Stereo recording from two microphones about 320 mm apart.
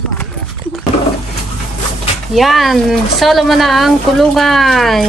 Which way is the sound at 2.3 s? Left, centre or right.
Centre.